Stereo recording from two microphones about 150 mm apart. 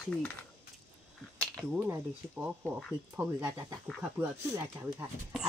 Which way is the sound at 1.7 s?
10° right (ahead or behind).